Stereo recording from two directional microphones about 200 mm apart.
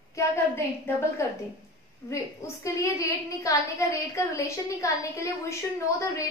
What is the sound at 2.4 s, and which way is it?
A woman's voice, 15° left (ahead or behind).